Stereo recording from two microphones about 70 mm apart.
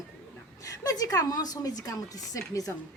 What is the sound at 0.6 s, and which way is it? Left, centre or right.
A woman's voice, left.